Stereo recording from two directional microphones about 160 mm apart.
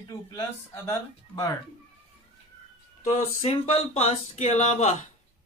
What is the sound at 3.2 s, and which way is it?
Speech, 40° left (ahead or behind).